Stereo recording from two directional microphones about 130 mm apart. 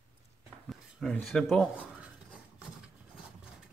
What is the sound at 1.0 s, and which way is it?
Speech, centre (ahead or behind).